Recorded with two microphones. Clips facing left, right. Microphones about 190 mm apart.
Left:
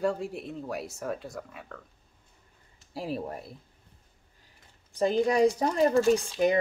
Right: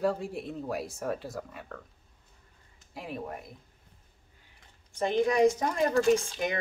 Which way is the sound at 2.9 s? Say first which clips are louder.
Left 4 dB; 35° left (ahead or behind).